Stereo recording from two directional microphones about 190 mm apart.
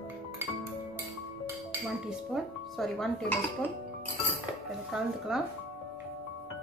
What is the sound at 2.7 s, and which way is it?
Dishes, centre (ahead or behind).